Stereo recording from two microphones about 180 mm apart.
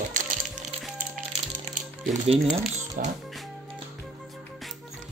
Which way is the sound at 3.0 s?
50° right (ahead or behind).